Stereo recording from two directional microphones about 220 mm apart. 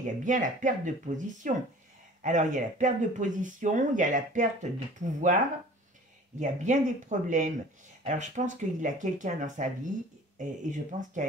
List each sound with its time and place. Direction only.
0.0 s speech: 35° right (ahead or behind)
6.4 s speech: 35° right (ahead or behind)
10.7 s speech: 35° right (ahead or behind)